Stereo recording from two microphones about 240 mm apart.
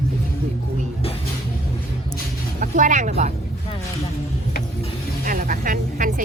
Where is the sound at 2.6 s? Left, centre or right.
Right.